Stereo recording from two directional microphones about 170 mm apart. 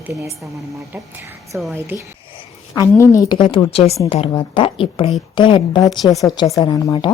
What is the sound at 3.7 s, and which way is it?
A woman's voice, 35° left (ahead or behind).